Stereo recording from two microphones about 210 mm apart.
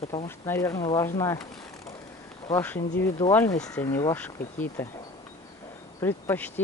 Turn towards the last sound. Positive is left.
turn(degrees=10)  # may be behind; listen again after turning